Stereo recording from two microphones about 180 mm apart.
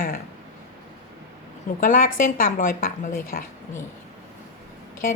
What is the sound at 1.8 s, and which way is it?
A woman's voice, 50° left (ahead or behind).